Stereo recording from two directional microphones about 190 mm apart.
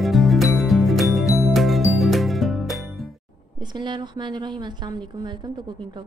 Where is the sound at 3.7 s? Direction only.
25° right (ahead or behind).